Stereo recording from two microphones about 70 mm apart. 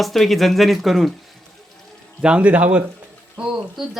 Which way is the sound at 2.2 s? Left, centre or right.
Centre.